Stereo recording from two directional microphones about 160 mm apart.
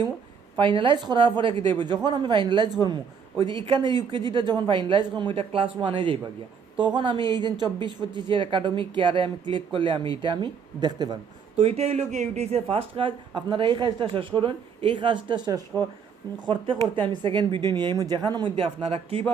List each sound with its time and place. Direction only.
0.6 s speech: 30° right (ahead or behind)
11.5 s speech: 40° right (ahead or behind)
15.7 s speech: 15° left (ahead or behind)
17.2 s speech: 30° right (ahead or behind)